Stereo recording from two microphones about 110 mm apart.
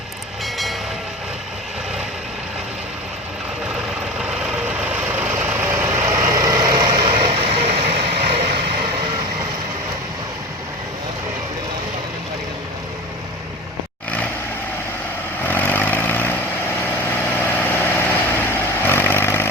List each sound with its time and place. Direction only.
4.8 s vehicle: 15° right (ahead or behind); by 8.4 s 70° right (ahead or behind)
15.4 s vehicle: 15° left (ahead or behind)
17.3 s vehicle: 15° left (ahead or behind)